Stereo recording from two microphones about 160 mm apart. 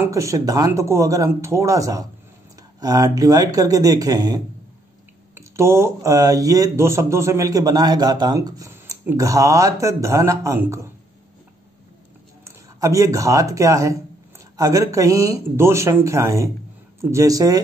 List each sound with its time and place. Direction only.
0.0 s speech: 20° right (ahead or behind)
12.4 s speech: 20° right (ahead or behind)